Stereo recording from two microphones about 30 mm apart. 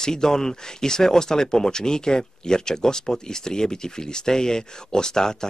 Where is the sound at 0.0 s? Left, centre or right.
Left.